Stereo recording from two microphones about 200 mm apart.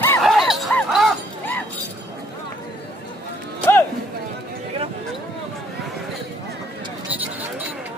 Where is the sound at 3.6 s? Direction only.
10° left (ahead or behind).